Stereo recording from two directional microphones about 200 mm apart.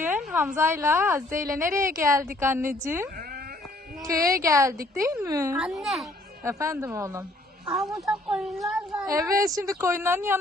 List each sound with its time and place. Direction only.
0.0 s a woman's voice: 5° right (ahead or behind)
5.5 s speech: centre (ahead or behind)
6.4 s speech: 15° right (ahead or behind)
8.0 s speech: centre (ahead or behind)
9.0 s a woman's voice: 15° right (ahead or behind)